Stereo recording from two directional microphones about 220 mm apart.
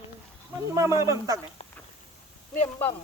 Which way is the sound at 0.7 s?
15° right (ahead or behind).